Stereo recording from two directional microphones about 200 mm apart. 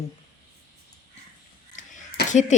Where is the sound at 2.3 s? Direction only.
35° left (ahead or behind).